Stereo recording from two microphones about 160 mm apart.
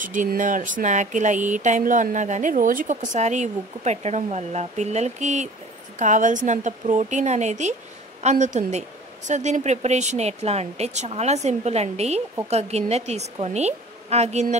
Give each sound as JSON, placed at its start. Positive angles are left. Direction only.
{"t": 0.0, "sound": "speech", "side_deg": -55}